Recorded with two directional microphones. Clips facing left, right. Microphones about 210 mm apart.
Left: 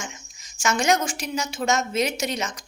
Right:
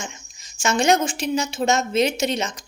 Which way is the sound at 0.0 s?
30° right (ahead or behind).